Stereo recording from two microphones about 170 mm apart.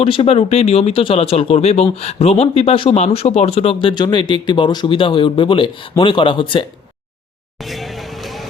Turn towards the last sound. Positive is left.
turn(degrees=30)  # may be behind; listen again after turning